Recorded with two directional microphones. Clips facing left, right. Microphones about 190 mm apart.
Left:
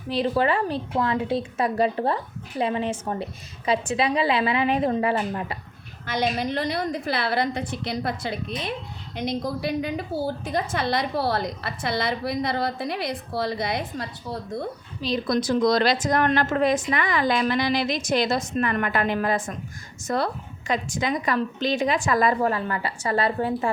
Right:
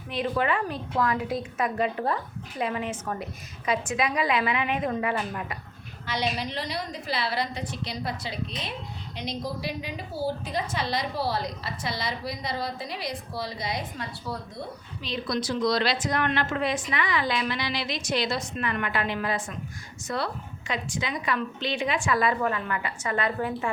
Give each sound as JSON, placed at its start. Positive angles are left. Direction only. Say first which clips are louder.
{"t": 0.1, "sound": "a woman's voice", "louder": "left 4 dB", "side_deg": 35}
{"t": 6.1, "sound": "a woman's voice", "louder": "left 5 dB", "side_deg": 50}
{"t": 15.0, "sound": "a woman's voice", "louder": "left 6 dB", "side_deg": 45}